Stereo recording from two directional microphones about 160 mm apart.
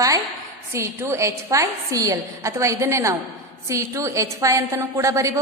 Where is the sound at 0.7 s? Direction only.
15° right (ahead or behind).